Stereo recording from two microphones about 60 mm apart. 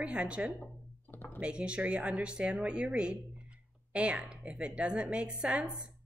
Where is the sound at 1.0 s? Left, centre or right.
Left.